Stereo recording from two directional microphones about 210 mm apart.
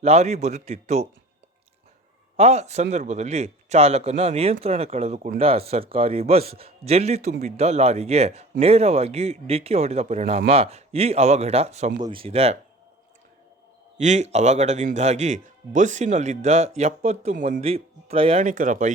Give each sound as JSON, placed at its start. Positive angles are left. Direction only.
{"t": 0.0, "sound": "speech", "side_deg": -30}
{"t": 2.3, "sound": "speech", "side_deg": -30}
{"t": 14.0, "sound": "speech", "side_deg": -35}